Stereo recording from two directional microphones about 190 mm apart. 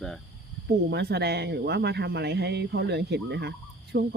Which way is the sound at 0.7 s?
60° right (ahead or behind).